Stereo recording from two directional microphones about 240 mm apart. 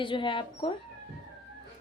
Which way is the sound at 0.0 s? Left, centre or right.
Left.